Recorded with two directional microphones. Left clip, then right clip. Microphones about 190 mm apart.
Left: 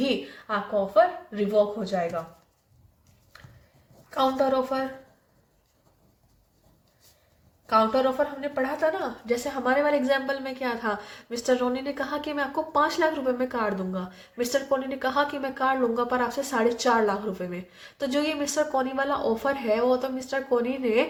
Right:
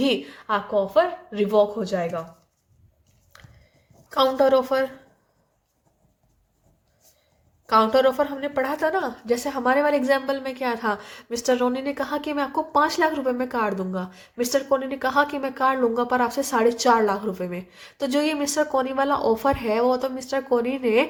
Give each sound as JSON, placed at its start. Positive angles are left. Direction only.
{"t": 0.0, "sound": "a woman's voice", "side_deg": -40}
{"t": 4.1, "sound": "a woman's voice", "side_deg": -45}
{"t": 7.7, "sound": "a woman's voice", "side_deg": -45}